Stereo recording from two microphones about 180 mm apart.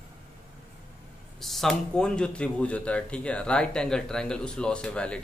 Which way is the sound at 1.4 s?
Centre (ahead or behind).